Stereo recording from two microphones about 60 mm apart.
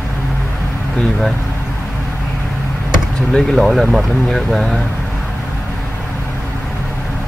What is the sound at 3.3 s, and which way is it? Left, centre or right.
Speech, centre.